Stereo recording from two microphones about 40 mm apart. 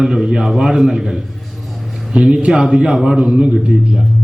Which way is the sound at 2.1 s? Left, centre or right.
Right.